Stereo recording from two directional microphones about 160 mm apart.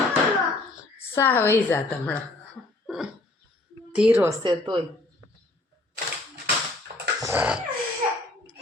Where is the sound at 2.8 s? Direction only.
5° right (ahead or behind).